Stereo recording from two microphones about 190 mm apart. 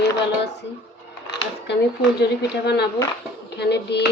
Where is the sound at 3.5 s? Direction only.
60° left (ahead or behind).